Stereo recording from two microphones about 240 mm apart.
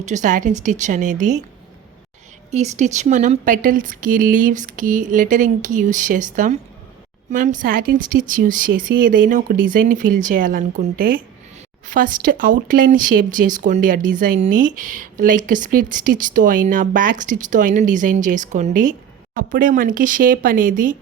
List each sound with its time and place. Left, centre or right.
0.0 s speech: right
2.5 s speech: right